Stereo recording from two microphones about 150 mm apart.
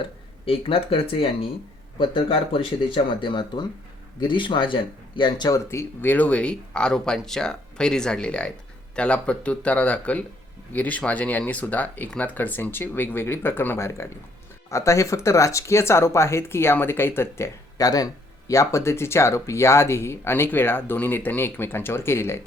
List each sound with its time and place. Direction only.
0.0 s speech: 35° left (ahead or behind); by 22.4 s 15° left (ahead or behind)